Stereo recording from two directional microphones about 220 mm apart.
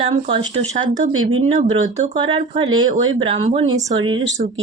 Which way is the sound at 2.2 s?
20° right (ahead or behind).